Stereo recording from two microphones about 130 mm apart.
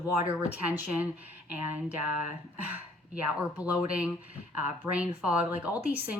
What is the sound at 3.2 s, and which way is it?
Speech, 10° right (ahead or behind).